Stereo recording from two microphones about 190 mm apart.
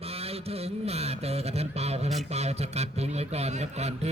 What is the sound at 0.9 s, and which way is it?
A man's voice, 35° right (ahead or behind).